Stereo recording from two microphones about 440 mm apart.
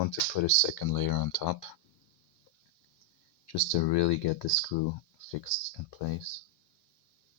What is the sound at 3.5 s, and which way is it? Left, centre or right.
Speech, left.